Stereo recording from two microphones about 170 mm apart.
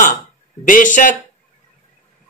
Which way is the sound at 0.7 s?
50° left (ahead or behind).